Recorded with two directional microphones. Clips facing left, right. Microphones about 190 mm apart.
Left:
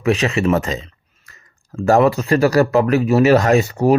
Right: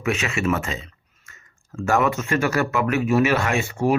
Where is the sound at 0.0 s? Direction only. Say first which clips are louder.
Left 7 dB; 35° left (ahead or behind).